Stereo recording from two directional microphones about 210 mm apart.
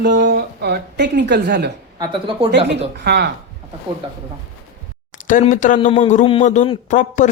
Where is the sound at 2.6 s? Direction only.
50° right (ahead or behind).